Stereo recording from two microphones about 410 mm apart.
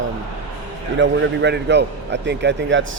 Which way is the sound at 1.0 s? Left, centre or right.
Right.